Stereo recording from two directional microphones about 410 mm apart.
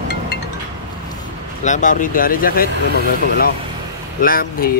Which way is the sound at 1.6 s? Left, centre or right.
Centre.